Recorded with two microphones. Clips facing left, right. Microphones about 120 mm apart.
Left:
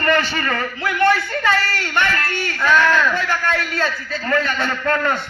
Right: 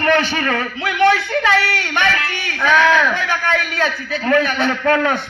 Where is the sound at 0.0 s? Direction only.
70° right (ahead or behind).